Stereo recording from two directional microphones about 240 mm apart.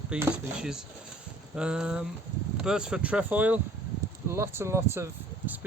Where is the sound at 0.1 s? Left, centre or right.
Centre.